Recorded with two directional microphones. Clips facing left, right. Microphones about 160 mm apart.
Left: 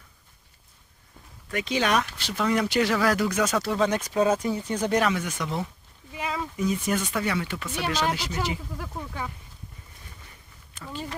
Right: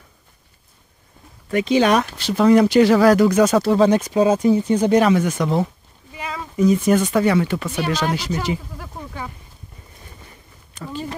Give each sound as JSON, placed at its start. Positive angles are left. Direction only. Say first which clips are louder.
{"t": 1.5, "sound": "speech", "louder": "right 9 dB", "side_deg": -25}
{"t": 5.1, "sound": "speech", "louder": "right 11 dB", "side_deg": -45}
{"t": 6.1, "sound": "a sound", "louder": "right 1 dB", "side_deg": 5}
{"t": 6.5, "sound": "speech", "louder": "right 12 dB", "side_deg": -45}
{"t": 8.7, "sound": "a sound", "louder": "right 1 dB", "side_deg": 0}
{"t": 10.7, "sound": "speech", "louder": "right 6 dB", "side_deg": -40}